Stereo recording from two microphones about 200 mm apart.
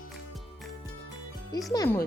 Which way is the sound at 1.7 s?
15° left (ahead or behind).